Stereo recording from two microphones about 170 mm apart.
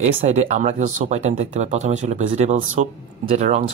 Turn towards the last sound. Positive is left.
turn(degrees=-40)  # may be behind; listen again after turning